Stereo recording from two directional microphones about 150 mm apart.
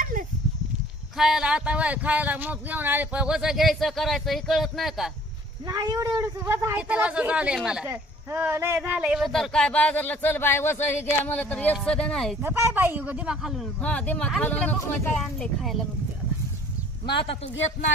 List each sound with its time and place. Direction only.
1.1 s speech: 5° right (ahead or behind)
5.7 s speech: 25° right (ahead or behind)
9.2 s speech: 5° left (ahead or behind)
12.4 s speech: 15° right (ahead or behind)
13.8 s speech: 5° left (ahead or behind)
17.2 s a man's voice: 40° left (ahead or behind)